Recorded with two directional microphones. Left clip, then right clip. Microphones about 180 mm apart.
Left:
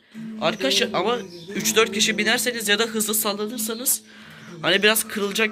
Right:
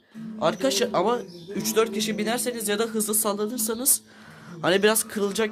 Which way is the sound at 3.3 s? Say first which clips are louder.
Even; 25° right (ahead or behind).